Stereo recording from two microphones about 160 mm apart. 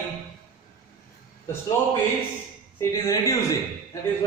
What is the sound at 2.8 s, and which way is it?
A man's voice, 20° left (ahead or behind).